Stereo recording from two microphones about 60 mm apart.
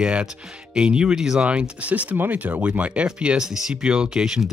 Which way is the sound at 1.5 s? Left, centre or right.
Right.